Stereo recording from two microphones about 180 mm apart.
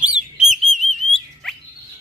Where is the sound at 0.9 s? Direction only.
Centre (ahead or behind).